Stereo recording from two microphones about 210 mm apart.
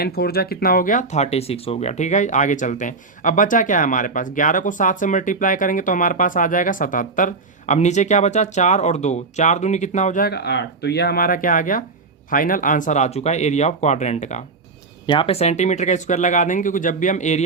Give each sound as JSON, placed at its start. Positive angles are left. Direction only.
{"t": 0.0, "sound": "speech", "side_deg": 45}
{"t": 15.0, "sound": "speech", "side_deg": 25}